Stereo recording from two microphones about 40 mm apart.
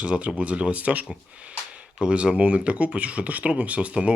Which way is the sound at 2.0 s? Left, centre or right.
Right.